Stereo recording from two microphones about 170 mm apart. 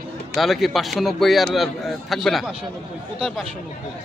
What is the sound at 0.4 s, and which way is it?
A man's voice, centre (ahead or behind).